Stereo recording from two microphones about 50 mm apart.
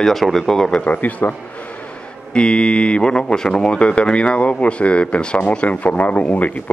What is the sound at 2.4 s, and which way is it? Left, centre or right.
Speech, centre.